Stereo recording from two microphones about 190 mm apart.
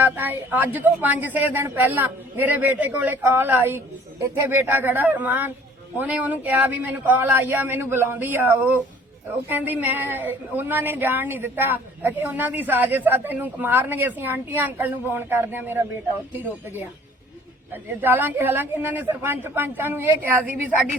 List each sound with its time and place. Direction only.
0.0 s speech: 10° right (ahead or behind)